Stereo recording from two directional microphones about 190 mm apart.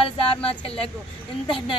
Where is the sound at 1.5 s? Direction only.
25° left (ahead or behind).